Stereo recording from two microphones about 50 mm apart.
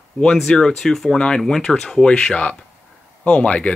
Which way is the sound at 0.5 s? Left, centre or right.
Centre.